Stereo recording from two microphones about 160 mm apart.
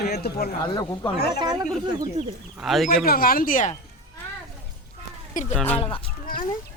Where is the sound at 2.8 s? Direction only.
65° left (ahead or behind).